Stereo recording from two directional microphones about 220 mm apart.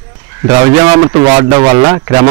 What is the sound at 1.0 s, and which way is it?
A man's voice, 20° right (ahead or behind).